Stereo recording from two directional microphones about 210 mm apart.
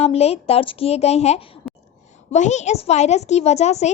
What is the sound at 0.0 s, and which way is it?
A woman's voice, 30° left (ahead or behind).